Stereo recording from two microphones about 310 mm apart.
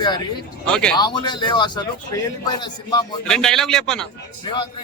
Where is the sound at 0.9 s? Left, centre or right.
Centre.